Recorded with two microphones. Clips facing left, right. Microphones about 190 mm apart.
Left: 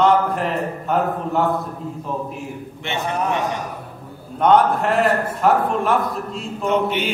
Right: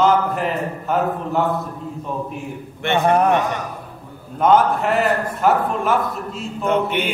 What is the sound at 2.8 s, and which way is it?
Speech, 55° right (ahead or behind).